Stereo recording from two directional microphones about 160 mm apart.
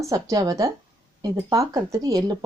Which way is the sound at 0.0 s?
20° right (ahead or behind).